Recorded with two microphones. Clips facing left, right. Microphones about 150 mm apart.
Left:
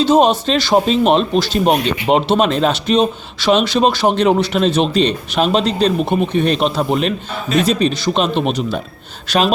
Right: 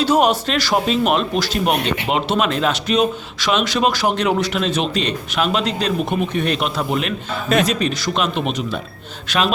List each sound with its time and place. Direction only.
0.0 s speech: 20° left (ahead or behind)